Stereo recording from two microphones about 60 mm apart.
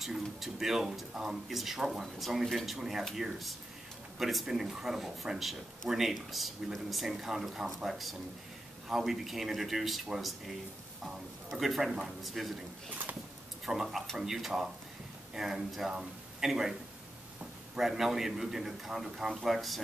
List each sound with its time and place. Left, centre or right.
0.0 s speech: centre
13.8 s a man's voice: centre
17.7 s speech: centre